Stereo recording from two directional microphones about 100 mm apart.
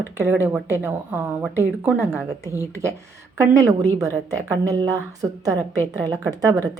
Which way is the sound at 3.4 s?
30° right (ahead or behind).